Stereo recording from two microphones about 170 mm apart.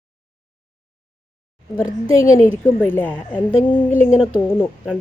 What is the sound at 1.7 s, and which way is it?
Speech, 15° left (ahead or behind).